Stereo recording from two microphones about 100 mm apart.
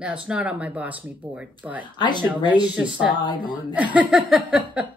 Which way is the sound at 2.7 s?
15° right (ahead or behind).